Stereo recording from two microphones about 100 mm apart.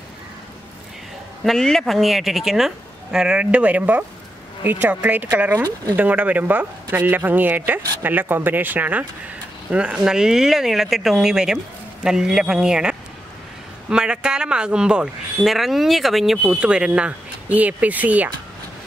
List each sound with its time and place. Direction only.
1.4 s speech: 5° left (ahead or behind); by 18.3 s 15° right (ahead or behind)